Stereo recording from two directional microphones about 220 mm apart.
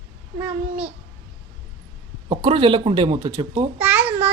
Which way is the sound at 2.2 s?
25° right (ahead or behind).